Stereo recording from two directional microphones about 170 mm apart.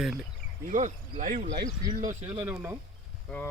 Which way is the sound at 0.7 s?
45° right (ahead or behind).